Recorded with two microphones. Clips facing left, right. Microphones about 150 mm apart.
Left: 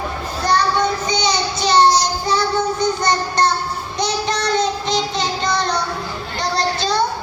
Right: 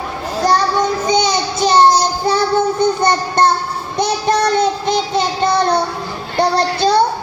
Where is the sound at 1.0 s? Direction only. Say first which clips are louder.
Right 4 dB; 50° right (ahead or behind).